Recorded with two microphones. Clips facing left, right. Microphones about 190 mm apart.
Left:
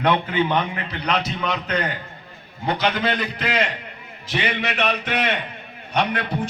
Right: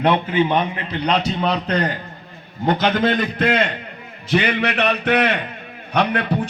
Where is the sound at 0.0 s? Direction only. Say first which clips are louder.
Right 3 dB; 20° right (ahead or behind).